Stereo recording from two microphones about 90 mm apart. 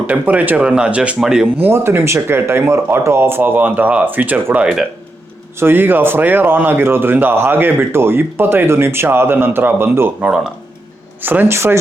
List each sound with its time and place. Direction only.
0.1 s speech: 20° right (ahead or behind)
1.6 s speech: 25° right (ahead or behind)
4.6 s speech: 5° right (ahead or behind)
5.5 s speech: 25° right (ahead or behind)
10.2 s speech: 10° right (ahead or behind)
11.2 s speech: 20° right (ahead or behind)